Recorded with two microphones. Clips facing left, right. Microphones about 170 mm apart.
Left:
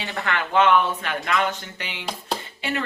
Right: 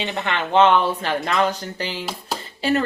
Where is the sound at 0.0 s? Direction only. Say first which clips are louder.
Right 2 dB; 20° right (ahead or behind).